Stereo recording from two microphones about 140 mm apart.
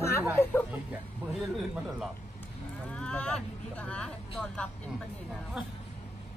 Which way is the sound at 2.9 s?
5° left (ahead or behind).